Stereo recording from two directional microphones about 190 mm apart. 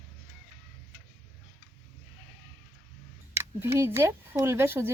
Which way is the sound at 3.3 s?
15° right (ahead or behind).